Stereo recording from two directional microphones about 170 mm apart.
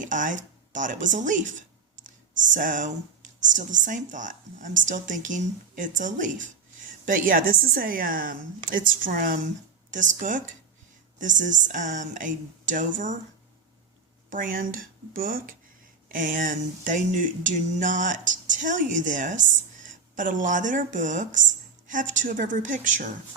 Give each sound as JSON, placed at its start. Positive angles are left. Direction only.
{"t": 0.0, "sound": "a woman's voice", "side_deg": -50}
{"t": 14.3, "sound": "a woman's voice", "side_deg": -50}